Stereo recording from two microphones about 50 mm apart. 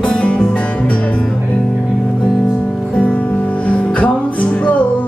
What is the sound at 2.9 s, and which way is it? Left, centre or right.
Music, left.